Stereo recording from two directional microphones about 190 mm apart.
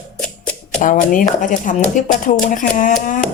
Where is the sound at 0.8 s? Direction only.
45° left (ahead or behind).